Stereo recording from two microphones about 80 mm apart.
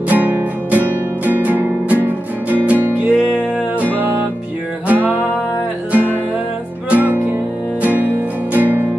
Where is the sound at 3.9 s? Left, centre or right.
Right.